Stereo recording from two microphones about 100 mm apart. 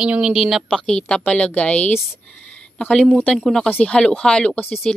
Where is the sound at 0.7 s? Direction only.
10° left (ahead or behind).